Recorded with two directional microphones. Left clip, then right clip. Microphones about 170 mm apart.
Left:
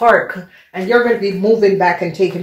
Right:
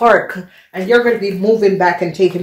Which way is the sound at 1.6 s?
45° right (ahead or behind).